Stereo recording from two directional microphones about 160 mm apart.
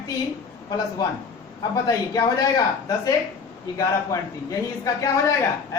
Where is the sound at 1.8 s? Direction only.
25° left (ahead or behind).